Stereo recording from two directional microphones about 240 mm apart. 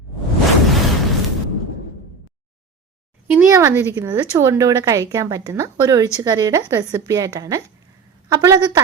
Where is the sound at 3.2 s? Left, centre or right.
Centre.